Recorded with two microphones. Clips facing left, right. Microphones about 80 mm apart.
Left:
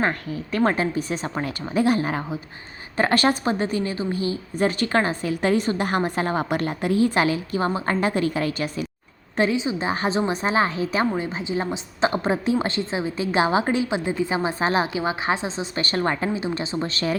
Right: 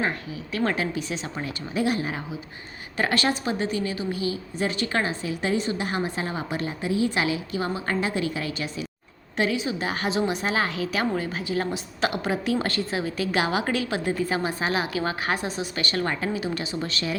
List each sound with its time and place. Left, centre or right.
0.0 s a woman's voice: left
9.3 s a woman's voice: left
14.6 s a woman's voice: left
14.9 s a woman's voice: centre; by 17.2 s left